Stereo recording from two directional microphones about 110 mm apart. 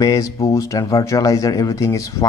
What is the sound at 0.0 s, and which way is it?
Speech, 30° left (ahead or behind).